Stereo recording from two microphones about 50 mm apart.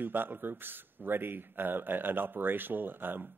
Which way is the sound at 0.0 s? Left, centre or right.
Right.